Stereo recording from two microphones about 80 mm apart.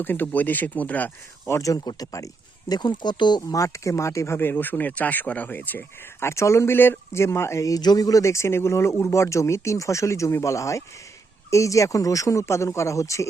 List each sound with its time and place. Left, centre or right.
0.0 s speech: left
1.5 s speech: left
3.5 s speech: left